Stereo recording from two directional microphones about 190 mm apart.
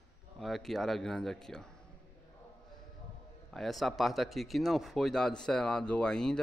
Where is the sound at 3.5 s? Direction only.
Centre (ahead or behind).